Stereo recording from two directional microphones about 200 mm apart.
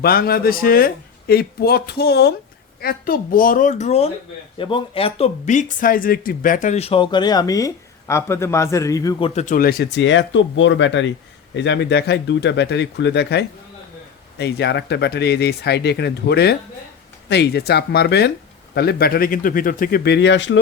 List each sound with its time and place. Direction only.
0.0 s speech: 50° left (ahead or behind); by 20.6 s 65° left (ahead or behind)